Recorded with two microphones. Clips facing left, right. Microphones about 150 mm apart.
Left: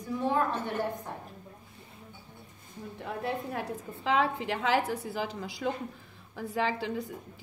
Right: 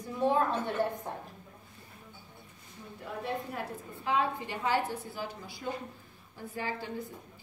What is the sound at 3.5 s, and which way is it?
A woman's voice, 90° left.